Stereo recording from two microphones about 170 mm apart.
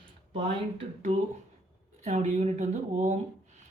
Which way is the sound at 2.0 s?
40° right (ahead or behind).